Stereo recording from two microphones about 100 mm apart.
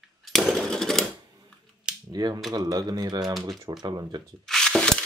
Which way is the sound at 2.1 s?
45° right (ahead or behind).